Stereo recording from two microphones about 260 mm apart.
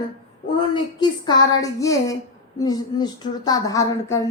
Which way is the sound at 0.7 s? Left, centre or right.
Centre.